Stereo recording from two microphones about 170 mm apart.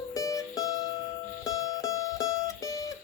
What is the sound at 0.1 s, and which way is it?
Music, 20° left (ahead or behind).